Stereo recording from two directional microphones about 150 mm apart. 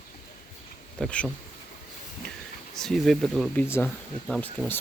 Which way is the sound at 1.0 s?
5° left (ahead or behind).